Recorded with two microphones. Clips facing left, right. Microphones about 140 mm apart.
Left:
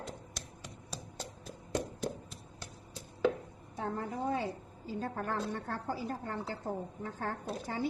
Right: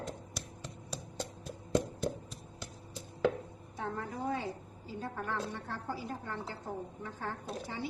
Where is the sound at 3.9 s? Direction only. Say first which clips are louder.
Left 2 dB; 30° left (ahead or behind).